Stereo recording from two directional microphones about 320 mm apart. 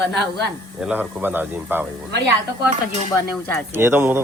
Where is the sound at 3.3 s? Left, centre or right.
Centre.